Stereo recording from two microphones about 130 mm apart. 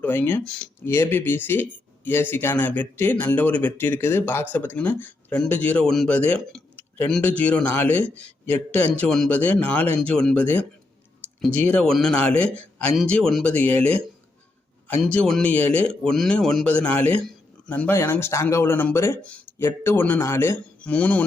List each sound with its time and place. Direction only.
0.0 s a man's voice: 15° left (ahead or behind)
15.0 s speech: 5° left (ahead or behind)